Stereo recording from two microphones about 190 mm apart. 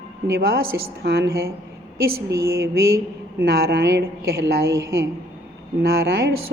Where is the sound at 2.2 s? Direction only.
15° right (ahead or behind).